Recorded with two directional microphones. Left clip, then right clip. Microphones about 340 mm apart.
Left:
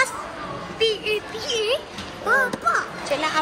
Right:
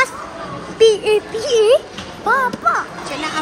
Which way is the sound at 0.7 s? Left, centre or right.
Right.